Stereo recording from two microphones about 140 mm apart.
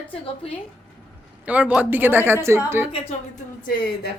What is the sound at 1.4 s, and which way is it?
A woman's voice, 10° right (ahead or behind).